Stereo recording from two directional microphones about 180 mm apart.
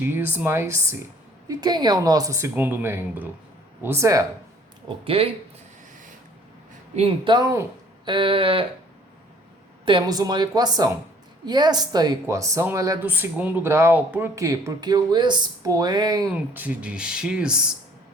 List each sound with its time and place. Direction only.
0.0 s speech: 10° right (ahead or behind)
5.0 s speech: 30° right (ahead or behind)
6.9 s speech: 30° right (ahead or behind)
8.1 s speech: 30° right (ahead or behind)
9.8 s speech: 25° right (ahead or behind)
16.3 s speech: 5° right (ahead or behind)